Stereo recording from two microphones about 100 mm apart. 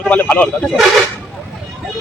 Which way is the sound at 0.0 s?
15° left (ahead or behind).